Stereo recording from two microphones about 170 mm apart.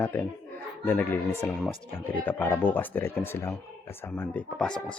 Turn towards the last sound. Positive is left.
turn(degrees=5)  # may be behind; listen again after turning